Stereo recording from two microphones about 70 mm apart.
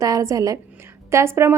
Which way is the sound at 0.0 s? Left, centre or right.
Right.